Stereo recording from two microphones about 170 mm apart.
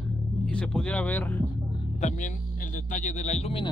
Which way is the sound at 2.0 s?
45° left (ahead or behind).